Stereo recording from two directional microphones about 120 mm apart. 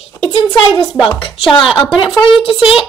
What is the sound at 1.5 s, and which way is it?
Speech, 45° left (ahead or behind).